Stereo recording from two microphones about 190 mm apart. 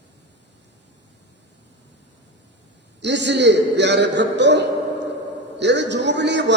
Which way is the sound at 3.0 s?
65° right (ahead or behind).